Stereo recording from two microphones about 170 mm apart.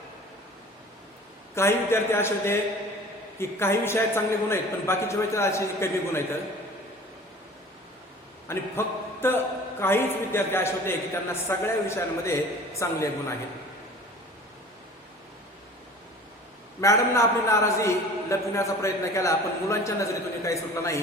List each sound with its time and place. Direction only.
1.5 s a man's voice: 15° left (ahead or behind)
8.5 s a man's voice: 15° left (ahead or behind)
16.8 s a man's voice: 15° left (ahead or behind)